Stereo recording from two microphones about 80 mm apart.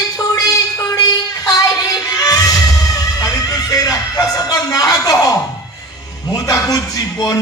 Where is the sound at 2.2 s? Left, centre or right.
Left.